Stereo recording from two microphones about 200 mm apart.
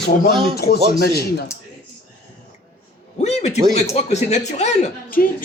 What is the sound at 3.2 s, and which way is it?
A man's voice, 35° left (ahead or behind).